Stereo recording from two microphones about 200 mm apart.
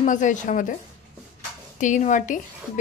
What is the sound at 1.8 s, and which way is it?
Speech, 40° left (ahead or behind).